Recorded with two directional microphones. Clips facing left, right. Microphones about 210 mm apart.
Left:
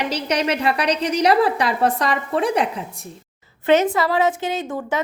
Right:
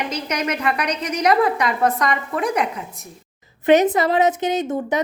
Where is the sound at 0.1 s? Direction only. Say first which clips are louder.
Left 3 dB; 30° left (ahead or behind).